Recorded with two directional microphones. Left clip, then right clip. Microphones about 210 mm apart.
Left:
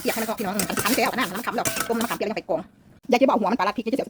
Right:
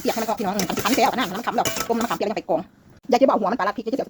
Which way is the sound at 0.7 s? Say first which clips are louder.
Right 3 dB; centre (ahead or behind).